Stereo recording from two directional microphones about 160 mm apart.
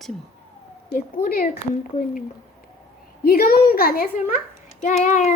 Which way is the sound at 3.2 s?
70° left (ahead or behind).